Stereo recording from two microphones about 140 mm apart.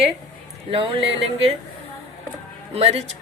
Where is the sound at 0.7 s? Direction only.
40° right (ahead or behind).